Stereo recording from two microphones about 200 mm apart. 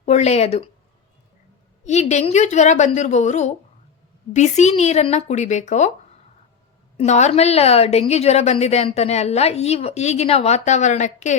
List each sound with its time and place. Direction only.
0.0 s a woman's voice: 35° left (ahead or behind)
1.8 s a woman's voice: 35° left (ahead or behind)
6.9 s a woman's voice: 35° left (ahead or behind)